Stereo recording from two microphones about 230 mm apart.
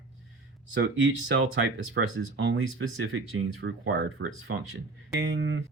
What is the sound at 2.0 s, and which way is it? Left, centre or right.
Speech, right.